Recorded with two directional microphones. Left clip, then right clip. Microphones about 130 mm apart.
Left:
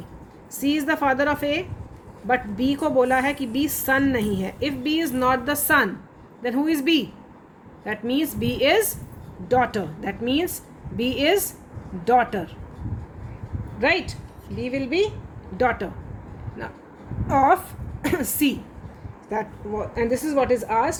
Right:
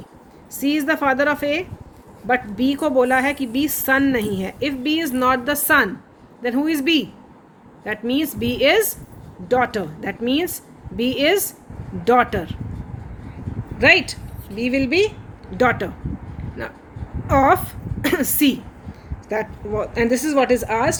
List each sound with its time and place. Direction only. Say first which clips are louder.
0.6 s a woman's voice: right 3 dB; 35° right (ahead or behind)
13.7 s a woman's voice: right 7 dB; 55° right (ahead or behind)
16.6 s a woman's voice: right 4 dB; 35° right (ahead or behind)
19.8 s speech: right 4 dB; 50° right (ahead or behind)